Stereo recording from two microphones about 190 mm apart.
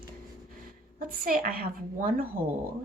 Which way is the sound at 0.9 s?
50° right (ahead or behind).